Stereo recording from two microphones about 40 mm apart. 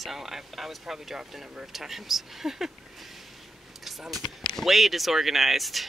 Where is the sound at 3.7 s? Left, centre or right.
Centre.